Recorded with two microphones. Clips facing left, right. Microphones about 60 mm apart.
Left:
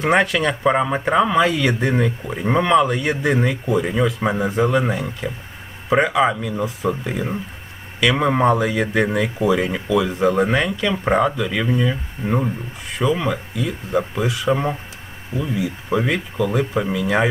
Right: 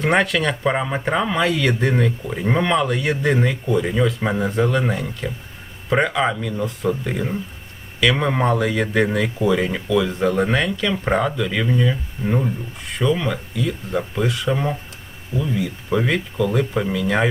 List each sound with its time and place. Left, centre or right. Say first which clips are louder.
0.0 s speech: left 1 dB; centre
14.5 s speech: left 2 dB; centre